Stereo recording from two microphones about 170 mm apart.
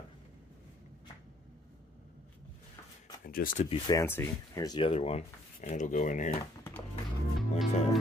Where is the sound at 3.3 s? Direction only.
55° left (ahead or behind).